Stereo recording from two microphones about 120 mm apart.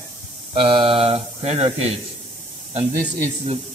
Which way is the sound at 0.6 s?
45° right (ahead or behind).